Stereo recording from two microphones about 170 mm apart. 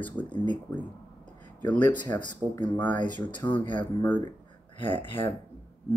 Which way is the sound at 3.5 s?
30° left (ahead or behind).